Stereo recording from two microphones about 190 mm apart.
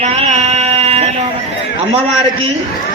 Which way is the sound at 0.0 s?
35° right (ahead or behind).